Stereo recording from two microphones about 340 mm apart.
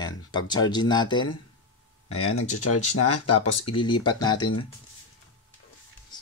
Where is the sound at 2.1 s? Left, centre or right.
Left.